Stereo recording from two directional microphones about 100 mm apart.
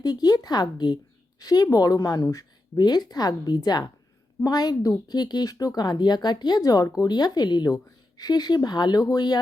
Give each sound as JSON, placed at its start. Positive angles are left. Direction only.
{"t": 0.0, "sound": "a woman's voice", "side_deg": 40}